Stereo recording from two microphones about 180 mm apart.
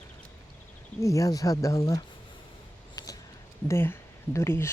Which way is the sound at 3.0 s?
20° left (ahead or behind).